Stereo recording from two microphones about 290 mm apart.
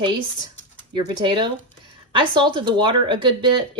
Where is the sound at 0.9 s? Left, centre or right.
Centre.